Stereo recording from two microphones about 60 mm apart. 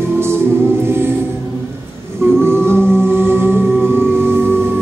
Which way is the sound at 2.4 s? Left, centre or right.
Right.